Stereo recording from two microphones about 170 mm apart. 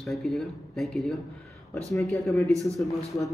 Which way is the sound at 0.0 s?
Centre (ahead or behind).